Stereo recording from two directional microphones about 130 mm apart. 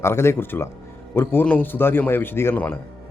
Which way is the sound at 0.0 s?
20° left (ahead or behind).